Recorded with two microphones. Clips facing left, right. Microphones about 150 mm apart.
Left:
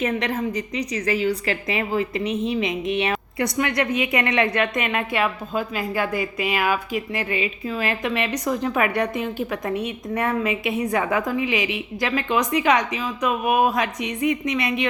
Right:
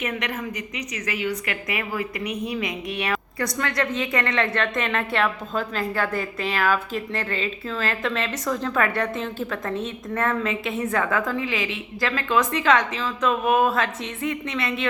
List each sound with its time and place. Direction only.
0.0 s a woman's voice: 30° left (ahead or behind); by 14.8 s 15° left (ahead or behind)